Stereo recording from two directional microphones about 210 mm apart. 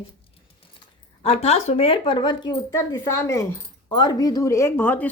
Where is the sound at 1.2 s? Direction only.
30° left (ahead or behind).